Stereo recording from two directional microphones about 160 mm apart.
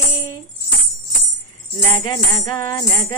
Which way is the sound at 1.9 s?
25° left (ahead or behind).